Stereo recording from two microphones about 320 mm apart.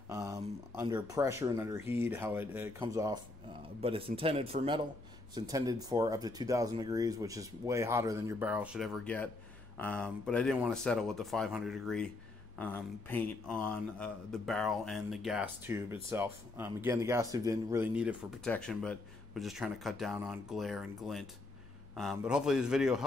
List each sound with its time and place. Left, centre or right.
0.1 s speech: centre